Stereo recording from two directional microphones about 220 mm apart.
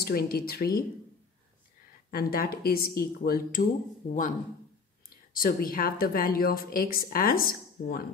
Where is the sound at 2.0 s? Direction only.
40° left (ahead or behind).